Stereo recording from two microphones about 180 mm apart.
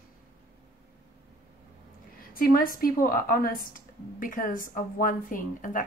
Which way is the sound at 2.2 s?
50° left (ahead or behind).